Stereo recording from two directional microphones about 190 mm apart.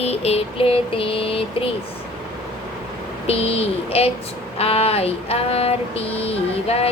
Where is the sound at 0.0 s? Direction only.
35° left (ahead or behind).